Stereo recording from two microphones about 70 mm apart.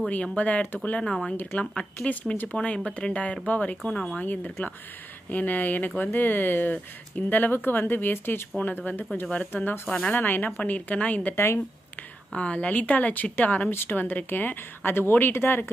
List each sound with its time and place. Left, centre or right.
0.4 s speech: left
3.8 s speech: centre
4.2 s speech: left
11.3 s speech: left
12.3 s speech: centre; by 15.7 s left